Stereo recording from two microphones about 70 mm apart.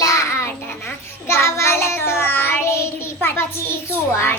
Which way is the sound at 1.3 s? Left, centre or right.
Left.